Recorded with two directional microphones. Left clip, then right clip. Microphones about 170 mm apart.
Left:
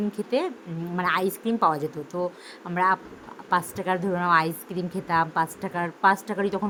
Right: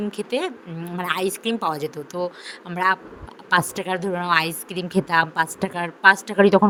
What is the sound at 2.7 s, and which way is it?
Speech, 30° right (ahead or behind).